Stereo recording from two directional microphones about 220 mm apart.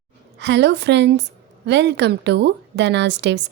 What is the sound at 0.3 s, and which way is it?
A woman's voice, 50° right (ahead or behind).